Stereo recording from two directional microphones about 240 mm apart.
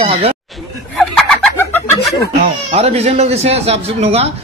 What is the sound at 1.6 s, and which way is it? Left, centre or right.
Chicken, centre.